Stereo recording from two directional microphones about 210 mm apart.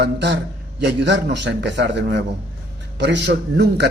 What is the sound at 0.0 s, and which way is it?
A man's voice, 55° right (ahead or behind).